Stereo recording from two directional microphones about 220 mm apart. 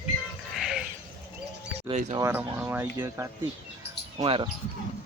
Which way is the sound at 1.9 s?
30° right (ahead or behind).